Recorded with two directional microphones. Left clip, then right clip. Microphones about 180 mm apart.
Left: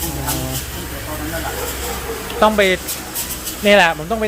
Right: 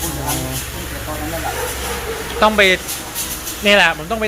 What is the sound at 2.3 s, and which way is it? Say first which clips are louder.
Speech: right 1 dB; 10° left (ahead or behind).